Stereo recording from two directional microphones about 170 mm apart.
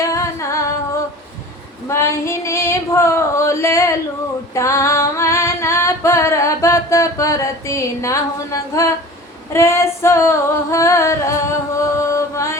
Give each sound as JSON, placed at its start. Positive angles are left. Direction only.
{"t": 0.0, "sound": "singing", "side_deg": 20}
{"t": 1.9, "sound": "female singing", "side_deg": 15}
{"t": 4.5, "sound": "singing", "side_deg": 15}
{"t": 9.5, "sound": "female singing", "side_deg": 15}
{"t": 11.9, "sound": "chant", "side_deg": 15}